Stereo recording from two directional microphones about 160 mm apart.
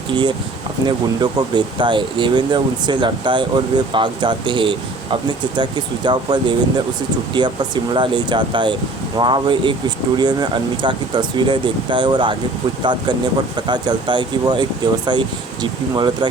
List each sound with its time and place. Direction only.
0.1 s speech: 30° right (ahead or behind)